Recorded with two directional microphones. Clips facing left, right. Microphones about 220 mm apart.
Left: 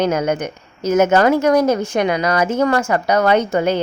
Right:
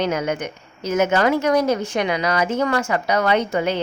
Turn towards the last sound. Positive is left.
turn(degrees=45)  # may be behind; listen again after turning